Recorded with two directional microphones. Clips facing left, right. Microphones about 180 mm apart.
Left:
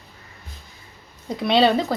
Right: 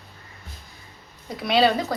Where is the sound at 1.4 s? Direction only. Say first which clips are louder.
Left 2 dB; 25° left (ahead or behind).